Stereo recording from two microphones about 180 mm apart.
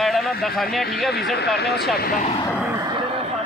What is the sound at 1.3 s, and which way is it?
Speech, 60° left (ahead or behind).